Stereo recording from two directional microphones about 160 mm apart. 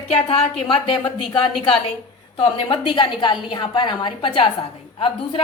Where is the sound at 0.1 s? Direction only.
35° left (ahead or behind).